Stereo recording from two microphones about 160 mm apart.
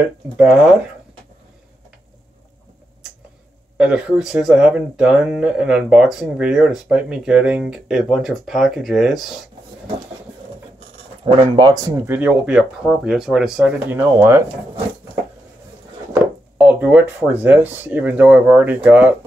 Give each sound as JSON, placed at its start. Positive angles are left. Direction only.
{"t": 0.5, "sound": "speech", "side_deg": -5}
{"t": 3.7, "sound": "speech", "side_deg": -5}
{"t": 11.3, "sound": "speech", "side_deg": -25}
{"t": 12.1, "sound": "speech", "side_deg": -10}
{"t": 16.6, "sound": "speech", "side_deg": -10}